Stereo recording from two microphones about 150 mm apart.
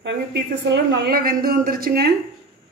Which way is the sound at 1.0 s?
85° right.